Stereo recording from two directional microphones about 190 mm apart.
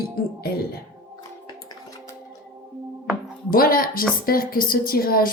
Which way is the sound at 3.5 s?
50° left (ahead or behind).